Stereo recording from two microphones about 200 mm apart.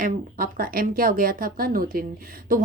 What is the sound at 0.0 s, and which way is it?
A woman's voice, 45° right (ahead or behind).